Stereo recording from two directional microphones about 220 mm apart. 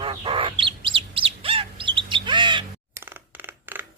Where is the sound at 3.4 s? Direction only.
10° right (ahead or behind).